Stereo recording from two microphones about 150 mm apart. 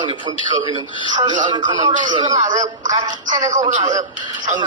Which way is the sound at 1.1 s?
30° right (ahead or behind).